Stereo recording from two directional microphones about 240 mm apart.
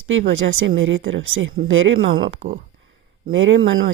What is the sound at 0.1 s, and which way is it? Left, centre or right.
Speech, right.